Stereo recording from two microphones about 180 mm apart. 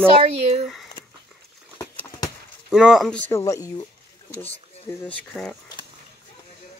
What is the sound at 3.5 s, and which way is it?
Speech, 15° left (ahead or behind).